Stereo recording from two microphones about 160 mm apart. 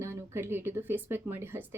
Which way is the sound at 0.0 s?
15° right (ahead or behind).